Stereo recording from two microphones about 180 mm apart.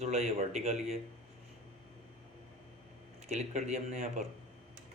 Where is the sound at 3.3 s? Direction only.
40° right (ahead or behind).